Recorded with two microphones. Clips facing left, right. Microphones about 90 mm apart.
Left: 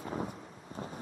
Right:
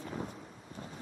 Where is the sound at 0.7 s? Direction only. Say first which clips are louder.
Left 6 dB; 20° left (ahead or behind).